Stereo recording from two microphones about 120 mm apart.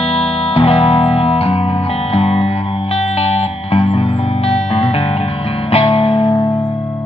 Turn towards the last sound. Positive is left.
turn(degrees=50)  # may be behind; listen again after turning